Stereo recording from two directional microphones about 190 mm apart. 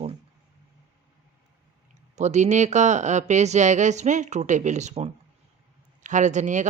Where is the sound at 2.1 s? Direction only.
35° right (ahead or behind).